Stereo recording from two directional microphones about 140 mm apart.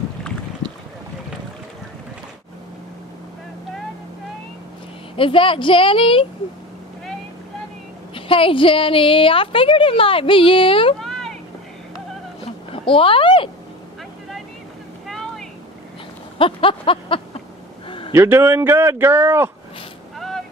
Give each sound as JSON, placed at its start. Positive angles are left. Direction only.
{"t": 5.1, "sound": "a woman's voice", "side_deg": 40}
{"t": 8.1, "sound": "a woman's voice", "side_deg": 40}
{"t": 12.7, "sound": "speech", "side_deg": 40}
{"t": 15.0, "sound": "vehicle", "side_deg": 0}
{"t": 16.3, "sound": "a sound", "side_deg": 40}
{"t": 18.1, "sound": "speech", "side_deg": -15}
{"t": 20.2, "sound": "vehicle", "side_deg": 0}